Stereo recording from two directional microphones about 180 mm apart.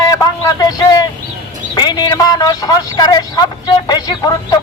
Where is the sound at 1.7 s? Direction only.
25° left (ahead or behind).